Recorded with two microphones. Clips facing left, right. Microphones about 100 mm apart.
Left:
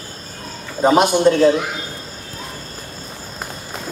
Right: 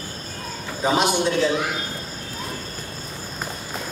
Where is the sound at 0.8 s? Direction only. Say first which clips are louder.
Left 7 dB; 50° left (ahead or behind).